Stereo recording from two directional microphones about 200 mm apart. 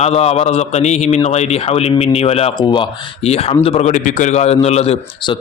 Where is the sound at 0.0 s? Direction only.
30° left (ahead or behind).